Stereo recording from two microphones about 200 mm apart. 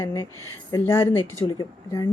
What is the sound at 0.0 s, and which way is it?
A woman's voice, 15° left (ahead or behind).